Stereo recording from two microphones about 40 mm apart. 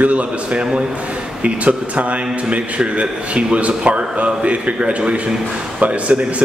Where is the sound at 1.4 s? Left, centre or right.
Right.